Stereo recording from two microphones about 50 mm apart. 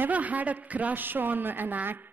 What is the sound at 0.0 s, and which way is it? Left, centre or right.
A woman's voice, right.